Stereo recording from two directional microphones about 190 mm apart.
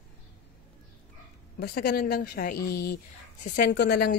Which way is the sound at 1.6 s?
55° left (ahead or behind).